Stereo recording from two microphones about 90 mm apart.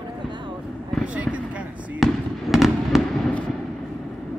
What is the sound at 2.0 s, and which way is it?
Speech, centre (ahead or behind).